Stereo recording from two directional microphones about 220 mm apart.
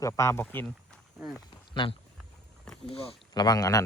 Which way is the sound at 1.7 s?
20° left (ahead or behind).